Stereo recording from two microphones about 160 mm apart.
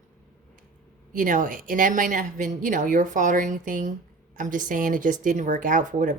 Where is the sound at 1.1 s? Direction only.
60° right (ahead or behind).